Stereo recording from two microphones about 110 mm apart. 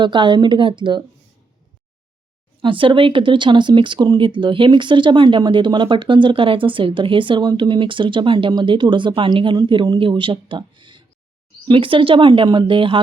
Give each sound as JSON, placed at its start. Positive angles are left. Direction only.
{"t": 0.0, "sound": "speech", "side_deg": -45}
{"t": 2.6, "sound": "speech", "side_deg": -50}